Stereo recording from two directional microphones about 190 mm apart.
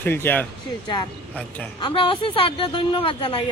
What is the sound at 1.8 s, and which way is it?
A woman's voice, 25° left (ahead or behind).